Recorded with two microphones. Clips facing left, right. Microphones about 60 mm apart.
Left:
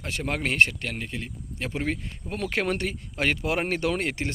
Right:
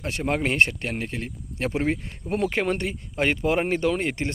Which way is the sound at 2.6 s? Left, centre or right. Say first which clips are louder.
Right 2 dB; centre.